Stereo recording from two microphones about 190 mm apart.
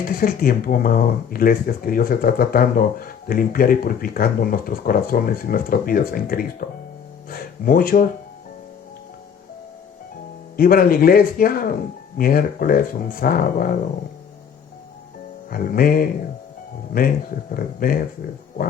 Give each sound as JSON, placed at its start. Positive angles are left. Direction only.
{"t": 0.0, "sound": "speech", "side_deg": 50}
{"t": 10.6, "sound": "speech", "side_deg": 50}
{"t": 15.4, "sound": "speech", "side_deg": 50}
{"t": 17.5, "sound": "speech", "side_deg": 50}